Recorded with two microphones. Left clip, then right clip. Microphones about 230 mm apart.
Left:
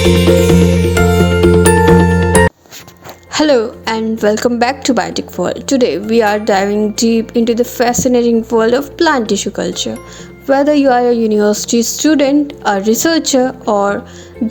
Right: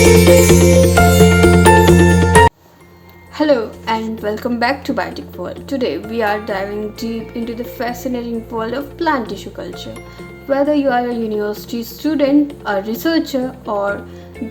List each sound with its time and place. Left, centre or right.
0.0 s music: centre
3.3 s a woman's voice: left